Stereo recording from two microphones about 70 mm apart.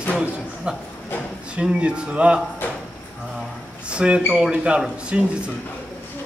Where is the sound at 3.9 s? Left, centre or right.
Centre.